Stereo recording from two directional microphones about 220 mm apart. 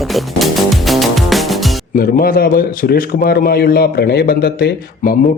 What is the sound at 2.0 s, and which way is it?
A man's voice, 40° left (ahead or behind).